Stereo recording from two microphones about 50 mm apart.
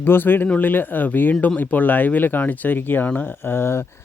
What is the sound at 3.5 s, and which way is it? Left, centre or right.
Speech, left.